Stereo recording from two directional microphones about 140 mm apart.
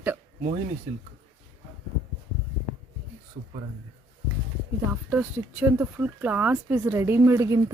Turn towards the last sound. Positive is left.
turn(degrees=-20)  # may be behind; listen again after turning